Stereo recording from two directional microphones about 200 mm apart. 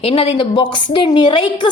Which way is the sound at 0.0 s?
25° left (ahead or behind).